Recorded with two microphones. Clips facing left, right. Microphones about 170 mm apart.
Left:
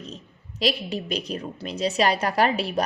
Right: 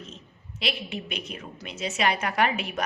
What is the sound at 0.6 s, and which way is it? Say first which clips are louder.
A woman's voice: left 6 dB; 35° left (ahead or behind).